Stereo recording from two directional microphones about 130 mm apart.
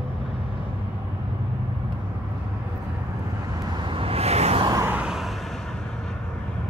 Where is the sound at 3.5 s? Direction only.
35° right (ahead or behind); by 4.7 s 55° right (ahead or behind).